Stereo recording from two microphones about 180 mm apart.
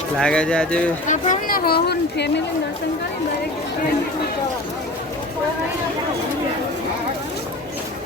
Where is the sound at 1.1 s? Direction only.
50° left (ahead or behind).